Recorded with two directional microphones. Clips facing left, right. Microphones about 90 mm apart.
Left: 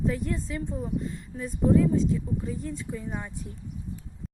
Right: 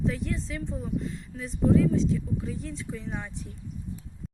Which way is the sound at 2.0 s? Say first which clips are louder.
Even; 5° left (ahead or behind).